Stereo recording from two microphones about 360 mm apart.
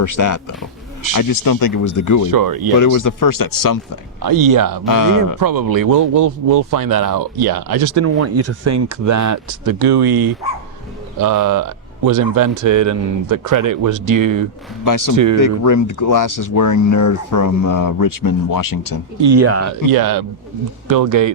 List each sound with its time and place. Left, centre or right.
0.0 s speech: left
2.3 s a man's voice: right
2.7 s speech: left
4.2 s speech: right
4.9 s speech: left
5.4 s speech: right
7.9 s speech: right
11.2 s speech: right
14.8 s speech: left
15.1 s speech: right
15.4 s speech: left
19.3 s speech: right
19.9 s a man's voice: right
20.8 s speech: right